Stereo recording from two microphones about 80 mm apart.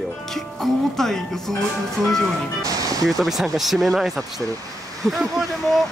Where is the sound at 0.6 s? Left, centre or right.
Centre.